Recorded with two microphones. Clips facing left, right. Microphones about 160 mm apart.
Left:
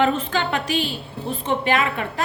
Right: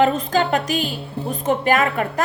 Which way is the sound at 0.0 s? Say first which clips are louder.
Right 3 dB; 40° right (ahead or behind).